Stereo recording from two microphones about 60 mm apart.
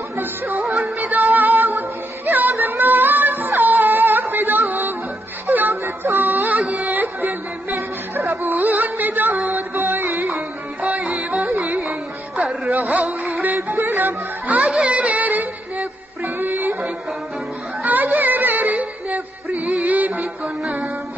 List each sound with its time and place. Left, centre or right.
0.6 s music: centre
0.9 s music: right
8.5 s music: right
10.8 s music: right
11.8 s music: centre
12.7 s a sound: right
13.7 s music: right
14.7 s a sound: centre
16.3 s music: right